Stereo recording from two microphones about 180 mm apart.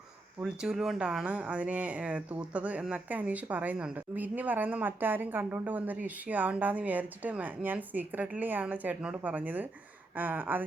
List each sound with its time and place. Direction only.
0.3 s speech: 5° right (ahead or behind)